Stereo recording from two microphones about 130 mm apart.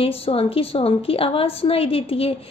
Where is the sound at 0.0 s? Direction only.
45° left (ahead or behind).